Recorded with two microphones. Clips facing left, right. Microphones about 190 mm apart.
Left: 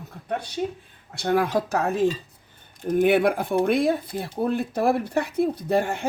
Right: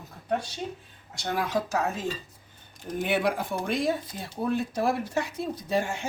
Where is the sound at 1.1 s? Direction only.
55° left (ahead or behind).